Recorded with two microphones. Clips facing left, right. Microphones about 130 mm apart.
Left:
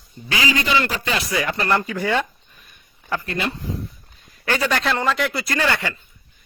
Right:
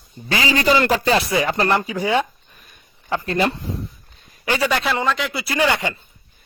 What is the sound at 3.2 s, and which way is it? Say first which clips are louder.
Speech: right 8 dB; 35° right (ahead or behind).